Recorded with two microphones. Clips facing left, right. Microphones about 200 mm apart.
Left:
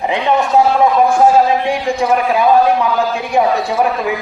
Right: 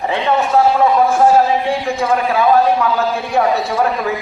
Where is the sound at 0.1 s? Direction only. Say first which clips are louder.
Left 1 dB; 15° left (ahead or behind).